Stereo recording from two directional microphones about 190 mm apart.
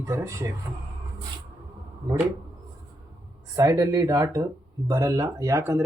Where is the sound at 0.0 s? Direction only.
15° right (ahead or behind).